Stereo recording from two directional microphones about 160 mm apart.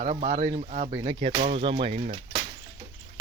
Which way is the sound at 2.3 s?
20° right (ahead or behind).